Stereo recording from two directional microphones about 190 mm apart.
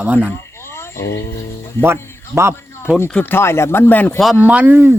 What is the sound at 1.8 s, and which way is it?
Speech, 15° right (ahead or behind).